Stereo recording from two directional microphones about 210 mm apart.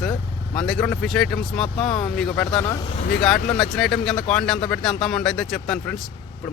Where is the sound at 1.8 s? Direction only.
25° left (ahead or behind).